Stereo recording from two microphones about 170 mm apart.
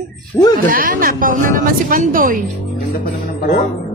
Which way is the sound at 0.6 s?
55° right (ahead or behind).